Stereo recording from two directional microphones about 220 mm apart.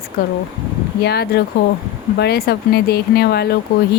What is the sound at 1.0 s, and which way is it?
Speech, 45° left (ahead or behind).